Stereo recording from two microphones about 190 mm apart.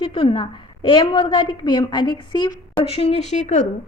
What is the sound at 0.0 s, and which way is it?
A woman's voice, 30° left (ahead or behind).